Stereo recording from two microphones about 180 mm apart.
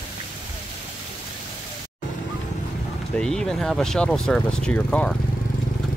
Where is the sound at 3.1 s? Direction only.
5° left (ahead or behind).